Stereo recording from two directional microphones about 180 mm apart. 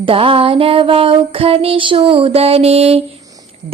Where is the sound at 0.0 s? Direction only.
30° right (ahead or behind).